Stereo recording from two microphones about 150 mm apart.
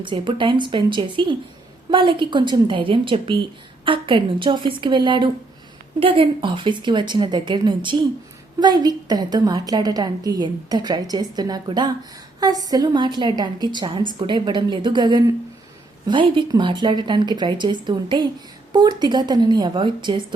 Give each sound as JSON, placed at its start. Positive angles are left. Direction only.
{"t": 0.0, "sound": "a woman's voice", "side_deg": -35}